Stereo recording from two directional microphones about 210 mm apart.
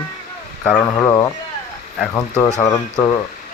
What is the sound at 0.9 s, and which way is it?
Speech, 15° left (ahead or behind).